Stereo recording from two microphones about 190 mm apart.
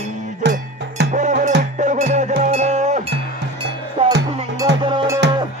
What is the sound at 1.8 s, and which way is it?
Music, 40° right (ahead or behind).